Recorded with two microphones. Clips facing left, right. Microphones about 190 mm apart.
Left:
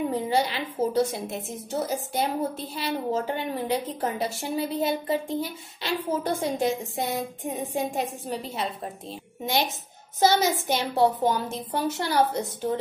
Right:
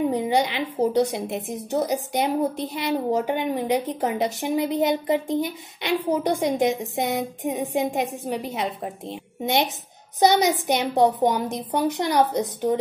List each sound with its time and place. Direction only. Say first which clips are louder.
0.1 s a woman's voice: right 3 dB; 15° right (ahead or behind)